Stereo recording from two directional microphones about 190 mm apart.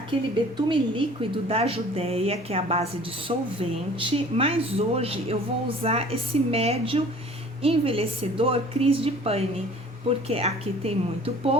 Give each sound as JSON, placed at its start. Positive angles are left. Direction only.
{"t": 0.5, "sound": "a woman's voice", "side_deg": -25}